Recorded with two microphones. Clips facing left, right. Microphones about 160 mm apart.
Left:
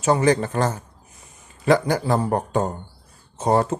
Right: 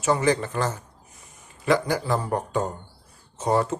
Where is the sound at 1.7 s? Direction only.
50° left (ahead or behind).